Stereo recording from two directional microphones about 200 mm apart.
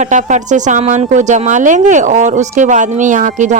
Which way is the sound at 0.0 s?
40° right (ahead or behind).